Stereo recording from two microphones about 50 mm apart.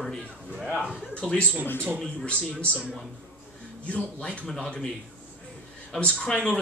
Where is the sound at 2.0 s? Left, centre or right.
Left.